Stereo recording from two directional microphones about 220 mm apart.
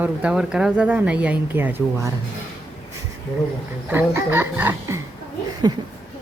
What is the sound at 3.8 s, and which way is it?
Speech, 10° right (ahead or behind).